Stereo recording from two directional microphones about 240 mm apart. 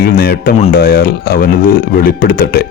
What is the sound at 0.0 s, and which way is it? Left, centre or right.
Speech, left.